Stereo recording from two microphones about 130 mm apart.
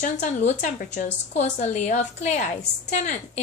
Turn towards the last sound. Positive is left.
turn(degrees=65)  # may be behind; listen again after turning